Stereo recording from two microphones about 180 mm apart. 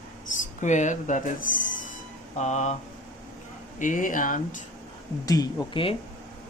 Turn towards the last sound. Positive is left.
turn(degrees=30)  # may be behind; listen again after turning